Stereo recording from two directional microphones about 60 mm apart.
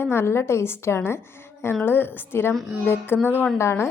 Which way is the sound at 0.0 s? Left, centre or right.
Left.